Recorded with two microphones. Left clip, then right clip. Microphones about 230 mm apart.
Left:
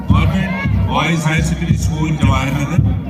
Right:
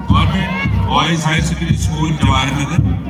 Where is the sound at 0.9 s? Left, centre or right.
Right.